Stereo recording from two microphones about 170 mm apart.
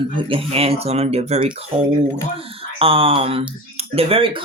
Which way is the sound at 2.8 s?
35° right (ahead or behind).